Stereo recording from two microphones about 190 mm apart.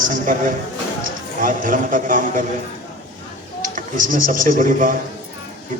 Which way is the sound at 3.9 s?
45° right (ahead or behind).